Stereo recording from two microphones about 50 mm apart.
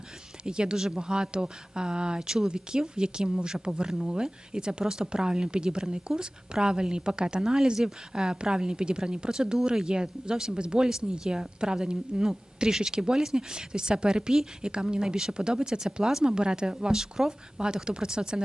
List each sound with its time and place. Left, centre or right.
0.4 s speech: centre